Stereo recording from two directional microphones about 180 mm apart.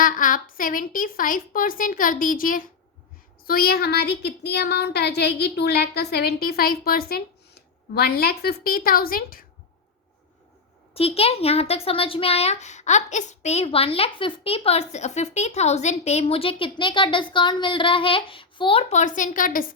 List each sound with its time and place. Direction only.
0.0 s a woman's voice: 50° left (ahead or behind)
10.9 s speech: 35° left (ahead or behind); by 19.6 s 50° left (ahead or behind)